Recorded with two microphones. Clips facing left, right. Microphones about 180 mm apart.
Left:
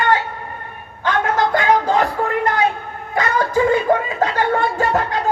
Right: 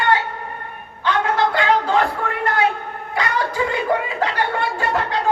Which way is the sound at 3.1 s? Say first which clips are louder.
Left 4 dB; 45° left (ahead or behind).